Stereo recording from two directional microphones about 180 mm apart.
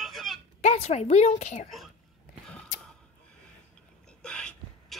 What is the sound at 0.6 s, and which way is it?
A woman's voice, 35° left (ahead or behind).